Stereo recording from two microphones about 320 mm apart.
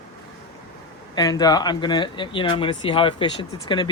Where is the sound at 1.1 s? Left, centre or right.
Centre.